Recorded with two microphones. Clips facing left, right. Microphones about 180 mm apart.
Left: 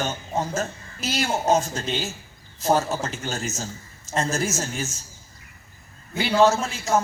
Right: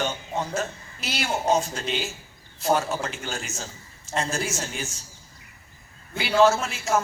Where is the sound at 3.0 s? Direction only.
40° left (ahead or behind).